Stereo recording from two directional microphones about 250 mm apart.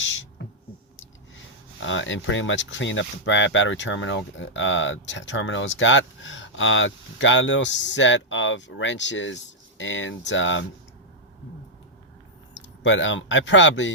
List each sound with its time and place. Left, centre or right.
0.4 s a sound: left
1.8 s speech: left
12.8 s speech: left